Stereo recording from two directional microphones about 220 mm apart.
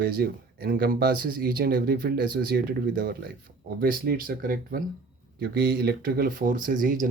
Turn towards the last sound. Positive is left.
turn(degrees=-35)  # may be behind; listen again after turning